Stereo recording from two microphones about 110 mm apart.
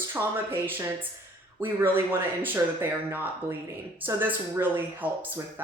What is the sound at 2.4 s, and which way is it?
A woman's voice, 20° right (ahead or behind).